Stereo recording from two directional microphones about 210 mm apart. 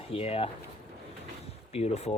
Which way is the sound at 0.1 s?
30° left (ahead or behind).